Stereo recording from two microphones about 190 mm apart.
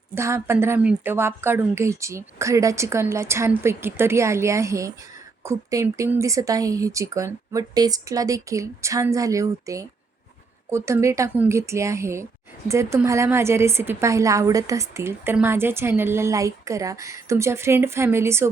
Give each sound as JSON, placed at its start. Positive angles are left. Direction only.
{"t": 0.1, "sound": "a woman's voice", "side_deg": -15}